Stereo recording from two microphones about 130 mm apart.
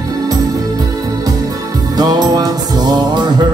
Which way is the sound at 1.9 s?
30° right (ahead or behind).